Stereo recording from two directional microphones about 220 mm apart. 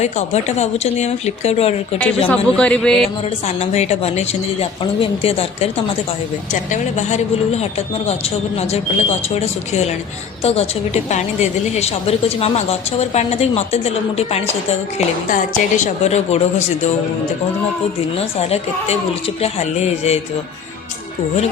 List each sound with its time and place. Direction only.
0.0 s a woman's voice: 30° left (ahead or behind)
2.0 s a man's voice: 5° left (ahead or behind)
3.4 s a woman's voice: 30° left (ahead or behind)
18.2 s a woman's voice: 30° left (ahead or behind)